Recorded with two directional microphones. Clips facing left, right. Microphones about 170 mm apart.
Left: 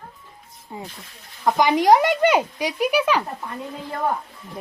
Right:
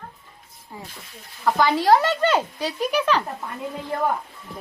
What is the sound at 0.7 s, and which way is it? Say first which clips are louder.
Speech: left 3 dB; 20° left (ahead or behind).